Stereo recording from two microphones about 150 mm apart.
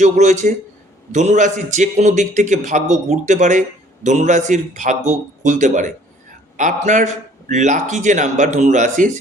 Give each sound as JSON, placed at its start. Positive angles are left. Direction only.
{"t": 0.0, "sound": "a man's voice", "side_deg": -50}